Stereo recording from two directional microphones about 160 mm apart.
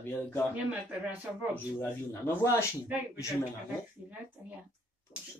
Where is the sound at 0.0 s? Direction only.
15° left (ahead or behind).